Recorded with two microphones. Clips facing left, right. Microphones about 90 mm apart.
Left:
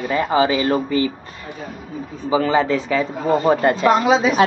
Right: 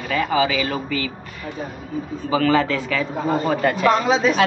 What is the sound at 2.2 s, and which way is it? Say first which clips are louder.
Speech: left 1 dB; 20° left (ahead or behind).